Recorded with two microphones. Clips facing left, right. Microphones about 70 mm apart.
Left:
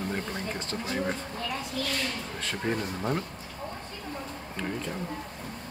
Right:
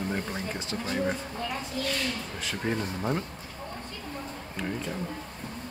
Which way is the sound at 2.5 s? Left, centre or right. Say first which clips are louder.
Even; centre.